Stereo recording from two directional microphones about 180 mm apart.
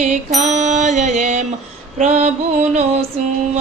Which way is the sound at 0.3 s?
40° right (ahead or behind).